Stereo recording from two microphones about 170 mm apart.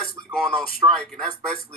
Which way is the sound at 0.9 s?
5° left (ahead or behind).